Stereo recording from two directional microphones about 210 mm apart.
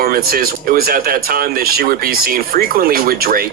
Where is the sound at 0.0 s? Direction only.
45° right (ahead or behind).